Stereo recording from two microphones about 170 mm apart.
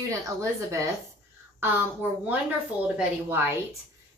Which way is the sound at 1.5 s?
10° right (ahead or behind).